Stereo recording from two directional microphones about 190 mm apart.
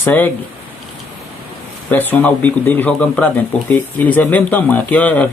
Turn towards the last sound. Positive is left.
turn(degrees=10)  # may be behind; listen again after turning